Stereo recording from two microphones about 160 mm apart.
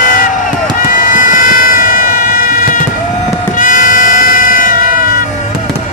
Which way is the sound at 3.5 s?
55° left (ahead or behind).